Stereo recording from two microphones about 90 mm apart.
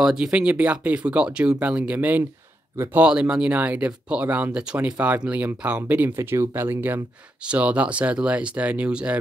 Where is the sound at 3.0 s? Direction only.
10° right (ahead or behind).